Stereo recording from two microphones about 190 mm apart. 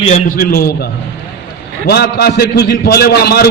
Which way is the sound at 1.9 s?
55° left (ahead or behind).